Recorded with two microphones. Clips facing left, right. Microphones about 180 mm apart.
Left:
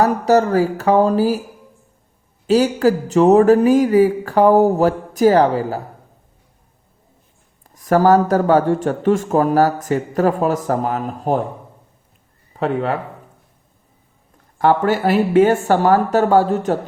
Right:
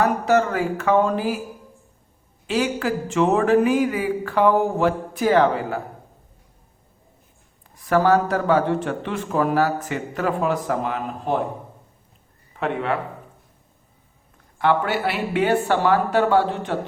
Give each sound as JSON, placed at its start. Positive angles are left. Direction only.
{"t": 0.0, "sound": "speech", "side_deg": 40}
{"t": 2.5, "sound": "speech", "side_deg": 40}
{"t": 7.8, "sound": "speech", "side_deg": 40}
{"t": 12.5, "sound": "speech", "side_deg": 35}
{"t": 14.6, "sound": "speech", "side_deg": 40}